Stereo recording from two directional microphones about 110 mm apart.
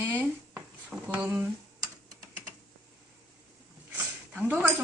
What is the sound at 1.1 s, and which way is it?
Cutlery, 10° right (ahead or behind).